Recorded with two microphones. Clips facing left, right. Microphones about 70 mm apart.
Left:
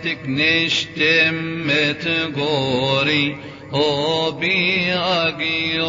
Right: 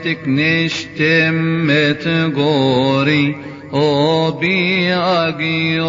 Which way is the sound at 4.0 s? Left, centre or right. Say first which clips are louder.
Right 6 dB; right.